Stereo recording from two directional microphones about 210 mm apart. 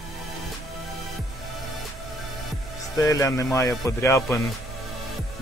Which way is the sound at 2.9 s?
15° left (ahead or behind).